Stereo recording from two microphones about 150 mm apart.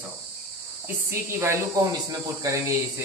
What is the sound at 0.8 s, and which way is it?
Speech, 15° right (ahead or behind).